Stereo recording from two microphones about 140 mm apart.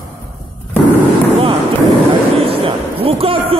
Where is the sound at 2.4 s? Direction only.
45° right (ahead or behind).